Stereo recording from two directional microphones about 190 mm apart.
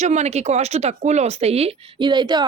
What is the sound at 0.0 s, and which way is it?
Speech, 35° right (ahead or behind).